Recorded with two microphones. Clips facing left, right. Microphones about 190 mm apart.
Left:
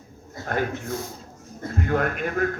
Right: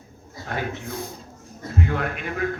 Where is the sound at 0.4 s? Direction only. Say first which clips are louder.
Left 3 dB; 50° left (ahead or behind).